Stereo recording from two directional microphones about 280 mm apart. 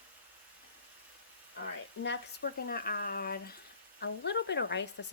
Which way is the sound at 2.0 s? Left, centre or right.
Left.